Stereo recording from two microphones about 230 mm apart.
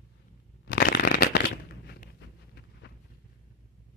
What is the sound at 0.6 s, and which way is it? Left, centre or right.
Shuffling cards, left.